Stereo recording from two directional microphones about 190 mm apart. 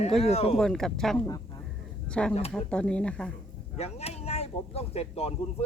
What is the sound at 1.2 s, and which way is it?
Speech, 15° left (ahead or behind).